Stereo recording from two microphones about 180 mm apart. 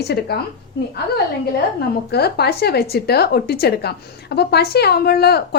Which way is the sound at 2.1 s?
60° left (ahead or behind).